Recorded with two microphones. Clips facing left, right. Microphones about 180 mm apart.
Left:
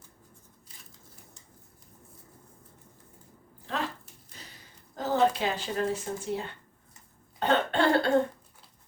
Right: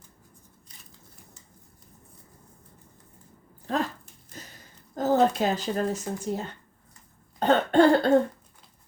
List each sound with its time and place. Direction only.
3.7 s speech: 45° right (ahead or behind)
4.3 s a sound: 45° right (ahead or behind)
7.3 s cough: 40° right (ahead or behind)